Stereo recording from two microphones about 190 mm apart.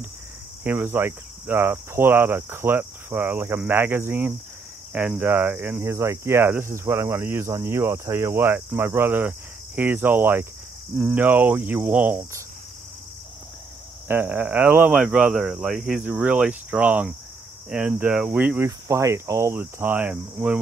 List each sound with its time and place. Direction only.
0.7 s speech: 10° right (ahead or behind)
14.0 s speech: 10° right (ahead or behind)